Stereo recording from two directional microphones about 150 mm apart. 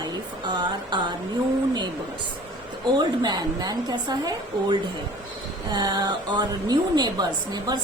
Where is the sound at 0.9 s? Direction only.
30° right (ahead or behind).